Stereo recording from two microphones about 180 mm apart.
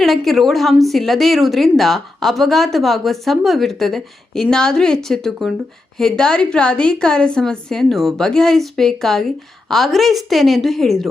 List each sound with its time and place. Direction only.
0.0 s a woman's voice: centre (ahead or behind)